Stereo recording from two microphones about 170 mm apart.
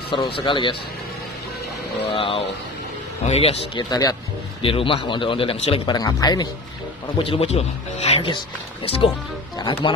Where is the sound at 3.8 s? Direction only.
20° left (ahead or behind).